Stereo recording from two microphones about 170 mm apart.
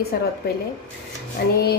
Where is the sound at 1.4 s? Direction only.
75° left (ahead or behind).